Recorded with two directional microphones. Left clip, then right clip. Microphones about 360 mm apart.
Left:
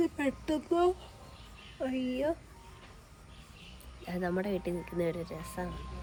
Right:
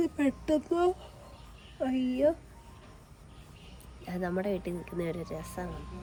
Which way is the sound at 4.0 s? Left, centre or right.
Centre.